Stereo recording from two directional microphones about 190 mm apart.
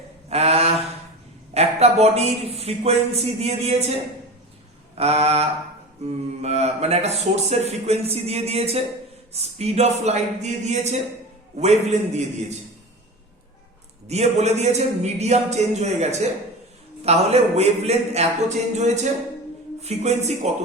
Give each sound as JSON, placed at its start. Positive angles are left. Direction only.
{"t": 0.3, "sound": "mantra", "side_deg": -35}
{"t": 1.5, "sound": "a man's voice", "side_deg": -35}
{"t": 14.1, "sound": "a man's voice", "side_deg": -35}